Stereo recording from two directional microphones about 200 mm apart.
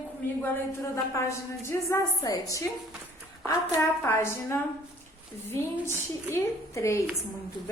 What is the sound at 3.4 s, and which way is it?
Speech, 15° left (ahead or behind).